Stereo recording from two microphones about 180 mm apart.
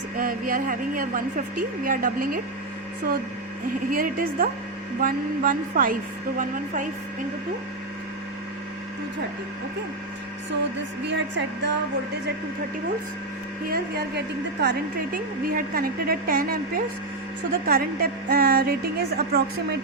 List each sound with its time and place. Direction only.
0.2 s a woman's voice: 50° right (ahead or behind)
3.9 s a woman's voice: 50° right (ahead or behind)
11.0 s a woman's voice: 75° right (ahead or behind)
13.7 s a woman's voice: 60° right (ahead or behind)
15.1 s a woman's voice: 55° right (ahead or behind)